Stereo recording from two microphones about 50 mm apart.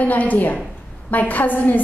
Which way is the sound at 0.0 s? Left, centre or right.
Left.